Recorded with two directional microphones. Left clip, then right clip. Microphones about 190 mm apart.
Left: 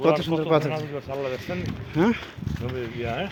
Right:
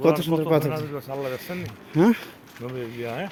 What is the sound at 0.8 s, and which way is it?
Speech, 15° right (ahead or behind).